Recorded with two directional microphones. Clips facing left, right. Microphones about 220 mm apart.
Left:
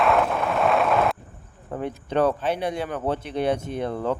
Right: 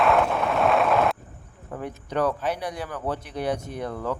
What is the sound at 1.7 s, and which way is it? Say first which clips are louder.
Speech: left 4 dB; 25° left (ahead or behind).